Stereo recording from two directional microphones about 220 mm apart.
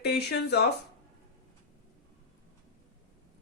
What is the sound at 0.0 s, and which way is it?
Speech, 50° left (ahead or behind).